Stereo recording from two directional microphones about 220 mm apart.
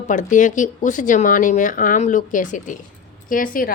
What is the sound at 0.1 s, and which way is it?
Speech, 35° left (ahead or behind).